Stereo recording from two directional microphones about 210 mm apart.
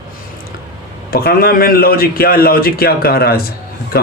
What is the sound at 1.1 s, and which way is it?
Speech, 45° left (ahead or behind).